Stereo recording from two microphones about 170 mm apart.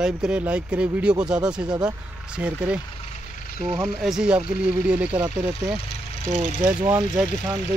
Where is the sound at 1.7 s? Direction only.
25° right (ahead or behind).